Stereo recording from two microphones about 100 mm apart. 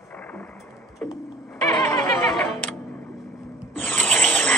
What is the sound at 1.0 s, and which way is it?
Clock, 10° left (ahead or behind).